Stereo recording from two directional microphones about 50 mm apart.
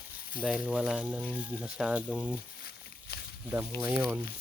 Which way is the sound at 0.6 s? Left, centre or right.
Right.